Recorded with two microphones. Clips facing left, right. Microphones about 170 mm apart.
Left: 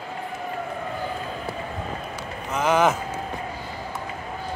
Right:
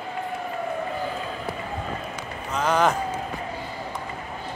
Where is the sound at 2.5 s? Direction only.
20° left (ahead or behind).